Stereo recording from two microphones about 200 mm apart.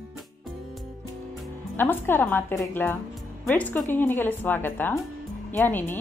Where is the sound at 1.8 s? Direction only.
10° left (ahead or behind).